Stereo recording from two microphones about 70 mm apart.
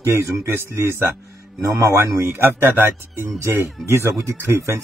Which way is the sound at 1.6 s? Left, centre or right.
Right.